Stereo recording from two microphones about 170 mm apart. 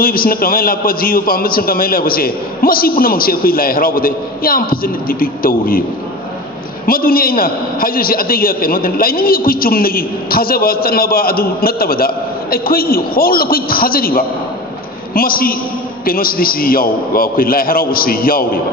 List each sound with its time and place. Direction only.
0.0 s a man's voice: 60° left (ahead or behind)
6.8 s a man's voice: 60° left (ahead or behind)